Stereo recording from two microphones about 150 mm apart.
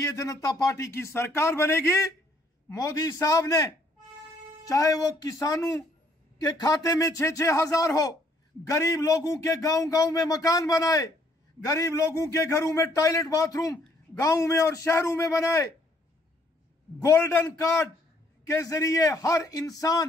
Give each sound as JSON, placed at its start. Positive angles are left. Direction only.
{"t": 0.0, "sound": "a man's voice", "side_deg": 20}
{"t": 17.0, "sound": "a man's voice", "side_deg": 20}